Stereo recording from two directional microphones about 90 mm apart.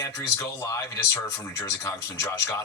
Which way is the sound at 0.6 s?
35° left (ahead or behind).